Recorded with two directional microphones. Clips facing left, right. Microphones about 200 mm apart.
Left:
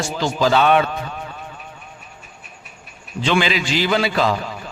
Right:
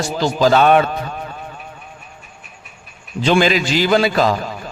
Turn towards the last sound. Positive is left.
turn(degrees=-45)  # may be behind; listen again after turning